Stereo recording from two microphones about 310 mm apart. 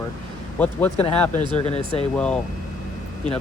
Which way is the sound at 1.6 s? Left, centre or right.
Centre.